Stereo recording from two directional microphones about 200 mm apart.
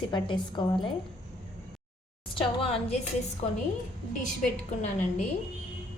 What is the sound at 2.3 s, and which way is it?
Speech, 30° left (ahead or behind).